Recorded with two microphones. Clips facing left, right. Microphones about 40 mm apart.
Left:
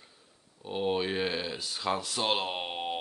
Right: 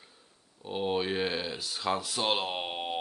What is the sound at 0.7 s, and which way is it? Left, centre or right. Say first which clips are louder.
Speech: even; centre.